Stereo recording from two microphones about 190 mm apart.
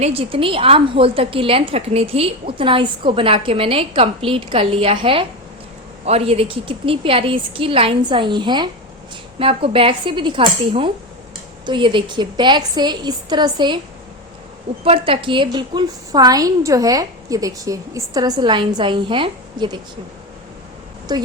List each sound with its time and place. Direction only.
0.0 s a woman's voice: 30° right (ahead or behind)
14.8 s a woman's voice: 30° right (ahead or behind)
21.1 s a woman's voice: 25° right (ahead or behind)